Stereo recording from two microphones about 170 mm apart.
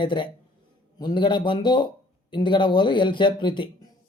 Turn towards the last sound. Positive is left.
turn(degrees=30)  # may be behind; listen again after turning